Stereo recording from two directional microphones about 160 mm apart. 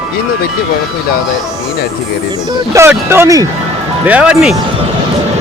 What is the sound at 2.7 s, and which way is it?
Speech, 15° right (ahead or behind).